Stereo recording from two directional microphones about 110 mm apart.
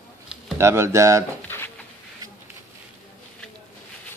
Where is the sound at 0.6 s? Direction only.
25° right (ahead or behind).